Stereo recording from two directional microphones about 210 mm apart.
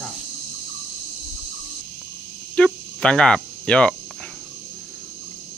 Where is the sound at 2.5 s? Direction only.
5° left (ahead or behind).